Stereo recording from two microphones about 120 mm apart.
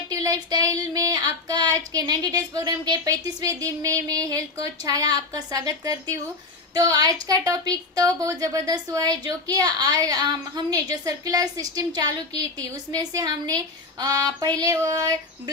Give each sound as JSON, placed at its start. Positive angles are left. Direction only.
{"t": 0.1, "sound": "child singing", "side_deg": -30}